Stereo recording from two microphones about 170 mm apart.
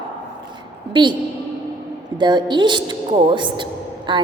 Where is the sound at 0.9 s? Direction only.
25° right (ahead or behind).